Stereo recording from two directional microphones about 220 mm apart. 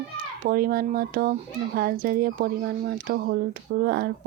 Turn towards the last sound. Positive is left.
turn(degrees=-45)  # may be behind; listen again after turning